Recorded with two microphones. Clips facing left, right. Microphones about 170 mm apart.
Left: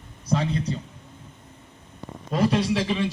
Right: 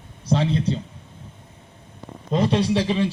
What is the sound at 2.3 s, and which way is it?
Speech, 30° right (ahead or behind).